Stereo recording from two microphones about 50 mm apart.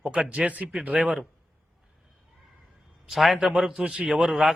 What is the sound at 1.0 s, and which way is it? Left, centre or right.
Speech, centre.